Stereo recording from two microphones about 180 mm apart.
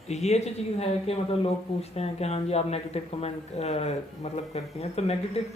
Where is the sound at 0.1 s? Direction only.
35° left (ahead or behind).